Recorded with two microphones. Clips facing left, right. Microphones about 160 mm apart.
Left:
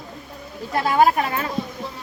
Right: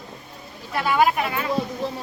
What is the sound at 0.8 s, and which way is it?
Speech, 40° left (ahead or behind).